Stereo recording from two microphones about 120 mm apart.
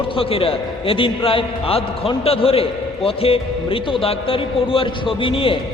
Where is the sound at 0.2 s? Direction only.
50° left (ahead or behind).